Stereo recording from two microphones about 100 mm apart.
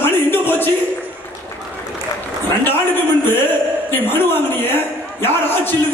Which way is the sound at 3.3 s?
20° left (ahead or behind).